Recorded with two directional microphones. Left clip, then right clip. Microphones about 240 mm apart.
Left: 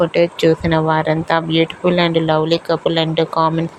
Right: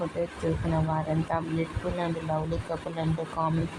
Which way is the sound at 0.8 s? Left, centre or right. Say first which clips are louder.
Left 14 dB; left.